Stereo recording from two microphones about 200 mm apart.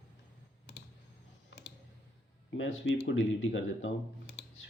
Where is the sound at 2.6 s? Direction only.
65° left (ahead or behind).